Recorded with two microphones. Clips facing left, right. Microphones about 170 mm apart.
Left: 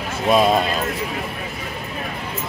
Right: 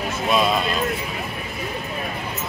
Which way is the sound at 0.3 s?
45° left (ahead or behind).